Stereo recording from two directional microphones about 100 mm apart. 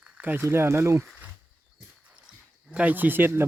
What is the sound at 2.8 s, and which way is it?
Speech, 15° right (ahead or behind).